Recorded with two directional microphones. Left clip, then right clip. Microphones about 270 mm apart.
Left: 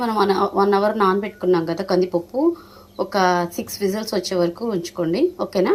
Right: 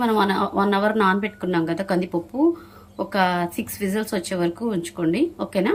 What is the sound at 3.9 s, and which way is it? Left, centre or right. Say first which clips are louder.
Speech: right 1 dB; right.